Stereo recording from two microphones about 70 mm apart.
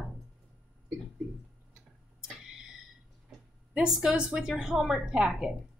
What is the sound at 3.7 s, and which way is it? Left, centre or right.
A woman's voice, centre.